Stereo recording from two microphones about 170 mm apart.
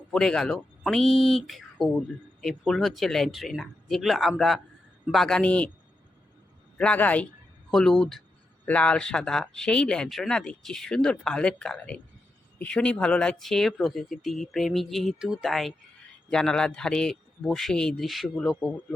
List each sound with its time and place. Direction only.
0.1 s speech: 5° left (ahead or behind)
6.7 s speech: 10° left (ahead or behind)